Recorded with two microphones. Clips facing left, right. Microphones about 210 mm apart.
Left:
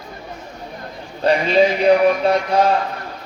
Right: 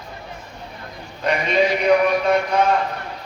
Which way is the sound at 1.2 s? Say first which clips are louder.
Left 4 dB; 30° left (ahead or behind).